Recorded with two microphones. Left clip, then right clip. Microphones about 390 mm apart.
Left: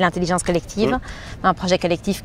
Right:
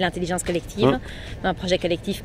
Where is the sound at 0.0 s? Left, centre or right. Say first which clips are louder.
Left 5 dB; left.